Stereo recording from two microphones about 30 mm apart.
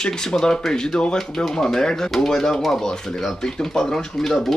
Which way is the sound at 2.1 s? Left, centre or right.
Centre.